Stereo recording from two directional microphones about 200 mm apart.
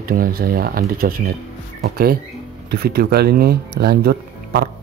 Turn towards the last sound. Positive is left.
turn(degrees=-50)  # may be behind; listen again after turning